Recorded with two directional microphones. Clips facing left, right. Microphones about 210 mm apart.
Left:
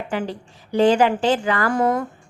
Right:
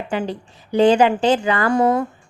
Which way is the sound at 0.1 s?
20° right (ahead or behind).